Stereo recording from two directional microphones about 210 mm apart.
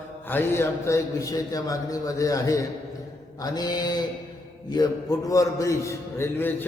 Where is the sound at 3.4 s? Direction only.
20° left (ahead or behind).